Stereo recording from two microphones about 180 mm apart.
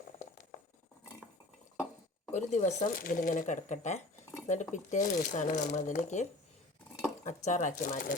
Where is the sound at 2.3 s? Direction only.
40° left (ahead or behind).